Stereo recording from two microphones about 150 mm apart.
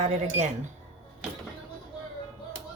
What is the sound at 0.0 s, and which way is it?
Speech, 50° right (ahead or behind).